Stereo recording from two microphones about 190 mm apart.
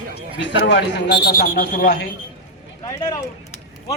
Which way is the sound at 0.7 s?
60° left (ahead or behind).